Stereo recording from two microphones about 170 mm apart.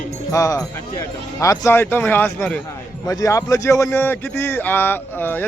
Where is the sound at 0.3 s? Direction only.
20° left (ahead or behind).